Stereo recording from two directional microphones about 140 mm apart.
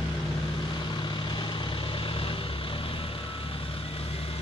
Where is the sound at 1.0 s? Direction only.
35° left (ahead or behind).